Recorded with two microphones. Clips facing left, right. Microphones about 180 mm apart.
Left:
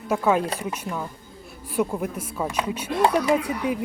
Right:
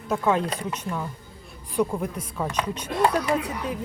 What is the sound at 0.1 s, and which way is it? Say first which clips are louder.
Speech: left 2 dB; 10° left (ahead or behind).